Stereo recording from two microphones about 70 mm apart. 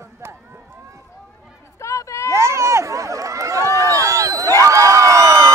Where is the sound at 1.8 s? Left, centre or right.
Left.